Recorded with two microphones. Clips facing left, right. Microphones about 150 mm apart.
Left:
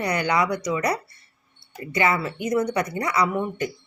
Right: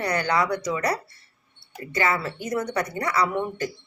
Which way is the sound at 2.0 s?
15° left (ahead or behind).